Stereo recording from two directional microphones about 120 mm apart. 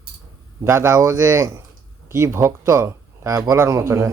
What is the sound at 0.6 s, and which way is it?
A man's voice, 20° right (ahead or behind).